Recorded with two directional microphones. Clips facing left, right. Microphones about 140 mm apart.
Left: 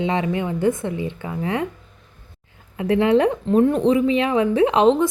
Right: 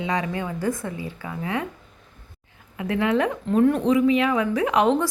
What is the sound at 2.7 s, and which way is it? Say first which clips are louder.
Speech: left 5 dB; 30° left (ahead or behind).